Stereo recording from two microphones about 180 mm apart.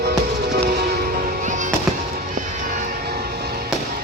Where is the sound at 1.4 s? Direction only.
45° right (ahead or behind).